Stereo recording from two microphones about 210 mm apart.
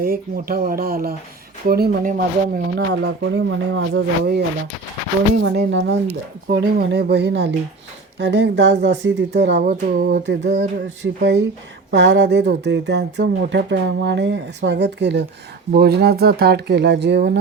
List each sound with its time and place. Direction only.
0.0 s speech: 45° right (ahead or behind)
9.6 s speech: 40° right (ahead or behind)
10.2 s speech: 55° right (ahead or behind)